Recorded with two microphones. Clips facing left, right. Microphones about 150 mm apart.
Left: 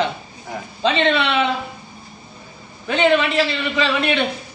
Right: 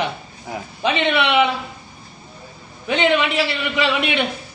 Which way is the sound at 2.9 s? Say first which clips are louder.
Left 1 dB; 20° right (ahead or behind).